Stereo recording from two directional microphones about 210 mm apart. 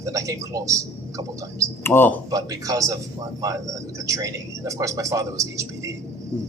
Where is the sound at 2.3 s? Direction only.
15° right (ahead or behind).